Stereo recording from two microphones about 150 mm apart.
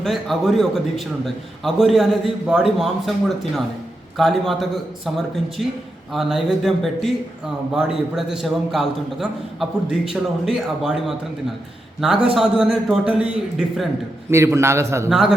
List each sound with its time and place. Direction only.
0.0 s a man's voice: centre (ahead or behind)
14.3 s a man's voice: 20° right (ahead or behind)
15.1 s a man's voice: centre (ahead or behind)